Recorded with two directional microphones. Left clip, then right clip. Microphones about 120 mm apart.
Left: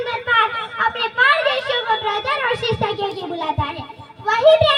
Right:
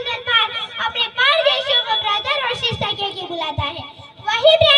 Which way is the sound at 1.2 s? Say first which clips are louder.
Even; 40° right (ahead or behind).